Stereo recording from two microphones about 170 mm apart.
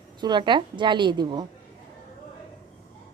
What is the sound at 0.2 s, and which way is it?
A woman's voice, 25° right (ahead or behind).